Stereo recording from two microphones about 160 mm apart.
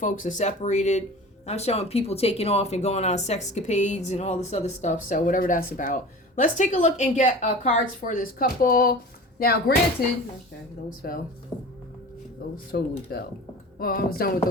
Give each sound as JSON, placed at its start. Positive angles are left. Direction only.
{"t": 0.0, "sound": "speech", "side_deg": 55}
{"t": 11.0, "sound": "speech", "side_deg": 70}
{"t": 11.5, "sound": "music", "side_deg": 25}
{"t": 12.4, "sound": "speech", "side_deg": 70}